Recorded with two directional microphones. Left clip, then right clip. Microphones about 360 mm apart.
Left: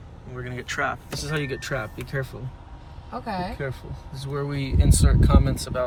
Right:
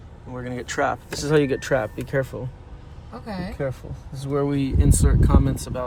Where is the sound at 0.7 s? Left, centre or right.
Right.